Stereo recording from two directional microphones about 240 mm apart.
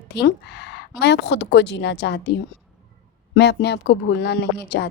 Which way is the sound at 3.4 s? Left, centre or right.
Left.